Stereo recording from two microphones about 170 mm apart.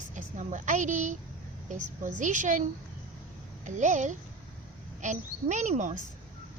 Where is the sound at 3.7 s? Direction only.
45° right (ahead or behind).